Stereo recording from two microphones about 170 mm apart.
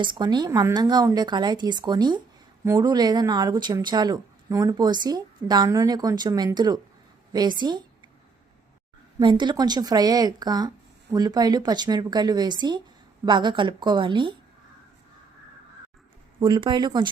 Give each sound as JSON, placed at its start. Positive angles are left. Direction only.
{"t": 0.0, "sound": "speech", "side_deg": -25}
{"t": 9.1, "sound": "speech", "side_deg": -25}
{"t": 16.4, "sound": "speech", "side_deg": -25}